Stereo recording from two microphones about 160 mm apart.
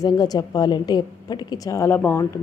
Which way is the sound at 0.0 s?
25° left (ahead or behind).